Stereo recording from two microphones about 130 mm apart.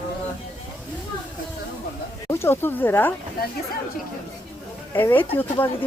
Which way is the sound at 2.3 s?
20° left (ahead or behind).